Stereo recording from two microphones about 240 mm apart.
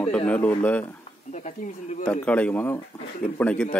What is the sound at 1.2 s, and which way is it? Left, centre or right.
Speech, left.